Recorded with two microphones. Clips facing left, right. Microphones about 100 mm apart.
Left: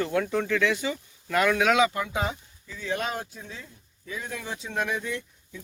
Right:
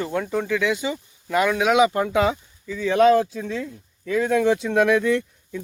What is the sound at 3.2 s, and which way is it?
Speech, 90° right.